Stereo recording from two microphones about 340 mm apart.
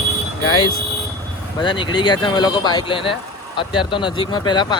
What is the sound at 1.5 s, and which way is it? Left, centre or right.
Speech, centre.